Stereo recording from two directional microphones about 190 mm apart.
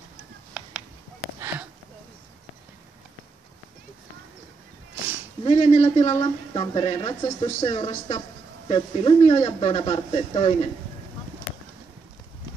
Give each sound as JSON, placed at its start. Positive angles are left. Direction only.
{"t": 5.4, "sound": "speech", "side_deg": 35}